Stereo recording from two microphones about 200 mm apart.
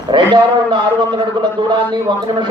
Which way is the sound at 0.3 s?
20° right (ahead or behind).